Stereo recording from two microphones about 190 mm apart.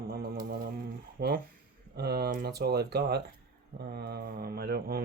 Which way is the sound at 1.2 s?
55° right (ahead or behind).